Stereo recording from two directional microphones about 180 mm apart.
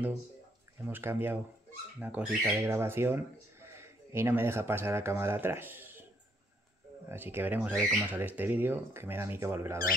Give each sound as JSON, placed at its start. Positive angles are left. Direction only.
{"t": 0.8, "sound": "speech", "side_deg": -10}
{"t": 7.1, "sound": "speech", "side_deg": -10}